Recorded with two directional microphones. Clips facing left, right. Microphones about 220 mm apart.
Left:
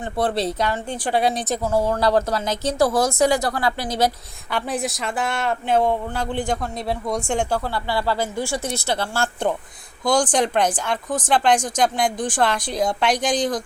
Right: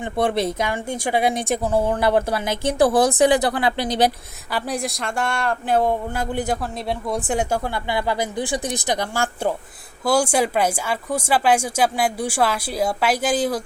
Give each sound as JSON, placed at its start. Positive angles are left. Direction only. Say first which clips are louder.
{"t": 0.0, "sound": "speech", "louder": "right 1 dB", "side_deg": -10}
{"t": 2.3, "sound": "speech", "louder": "right 1 dB", "side_deg": -10}
{"t": 4.5, "sound": "speech", "louder": "even", "side_deg": 0}